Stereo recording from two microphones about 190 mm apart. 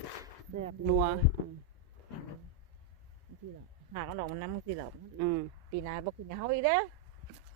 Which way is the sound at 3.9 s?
50° right (ahead or behind).